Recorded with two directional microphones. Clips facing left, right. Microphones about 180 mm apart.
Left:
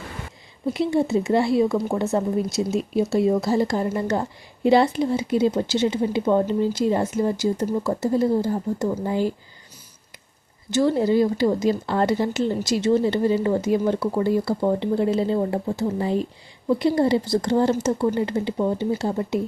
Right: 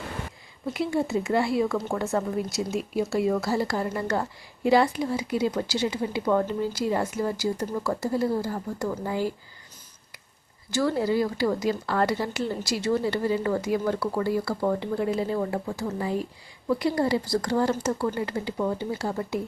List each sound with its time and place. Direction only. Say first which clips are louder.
0.7 s speech: left 5 dB; 25° left (ahead or behind)
10.7 s speech: left 5 dB; 20° left (ahead or behind)